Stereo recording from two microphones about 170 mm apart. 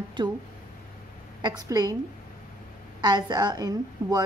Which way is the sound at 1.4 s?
20° right (ahead or behind).